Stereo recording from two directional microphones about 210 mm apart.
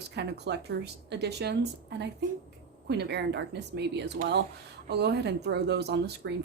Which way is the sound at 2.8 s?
50° right (ahead or behind).